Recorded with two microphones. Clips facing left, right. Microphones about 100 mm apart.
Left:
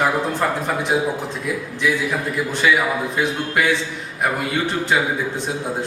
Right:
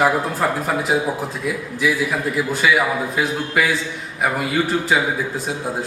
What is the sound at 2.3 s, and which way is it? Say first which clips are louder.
A man's voice: even; 5° right (ahead or behind).